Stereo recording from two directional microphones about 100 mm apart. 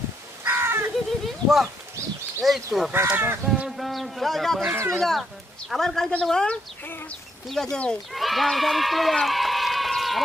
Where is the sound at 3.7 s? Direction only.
Centre (ahead or behind).